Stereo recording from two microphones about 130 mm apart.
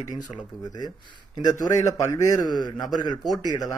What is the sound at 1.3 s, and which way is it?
A man's voice, 30° left (ahead or behind).